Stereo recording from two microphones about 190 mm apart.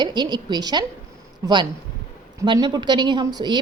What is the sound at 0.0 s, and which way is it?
Speech, 25° right (ahead or behind).